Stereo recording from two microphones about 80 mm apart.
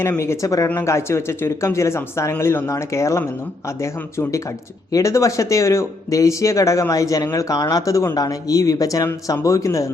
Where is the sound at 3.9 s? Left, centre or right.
Left.